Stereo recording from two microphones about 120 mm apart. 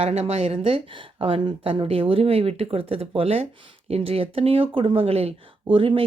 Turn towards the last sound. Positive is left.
turn(degrees=-45)  # may be behind; listen again after turning